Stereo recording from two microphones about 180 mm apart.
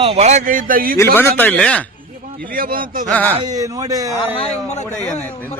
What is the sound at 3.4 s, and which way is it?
Speech, 20° right (ahead or behind).